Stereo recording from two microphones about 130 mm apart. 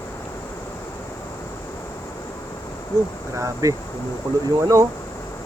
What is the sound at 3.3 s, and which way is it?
Speech, 25° right (ahead or behind).